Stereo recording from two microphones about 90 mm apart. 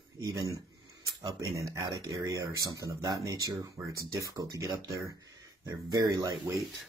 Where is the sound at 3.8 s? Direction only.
30° right (ahead or behind).